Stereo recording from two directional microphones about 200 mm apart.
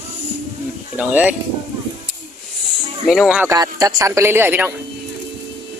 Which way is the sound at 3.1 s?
Centre (ahead or behind).